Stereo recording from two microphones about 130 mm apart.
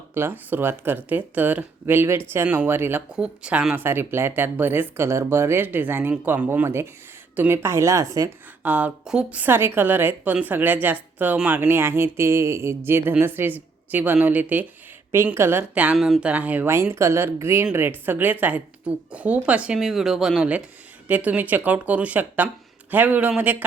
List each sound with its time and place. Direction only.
0.1 s speech: 15° right (ahead or behind)
8.6 s speech: 10° right (ahead or behind)